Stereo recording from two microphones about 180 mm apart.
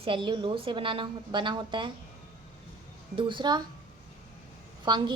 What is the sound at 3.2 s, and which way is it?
Speech, 25° right (ahead or behind).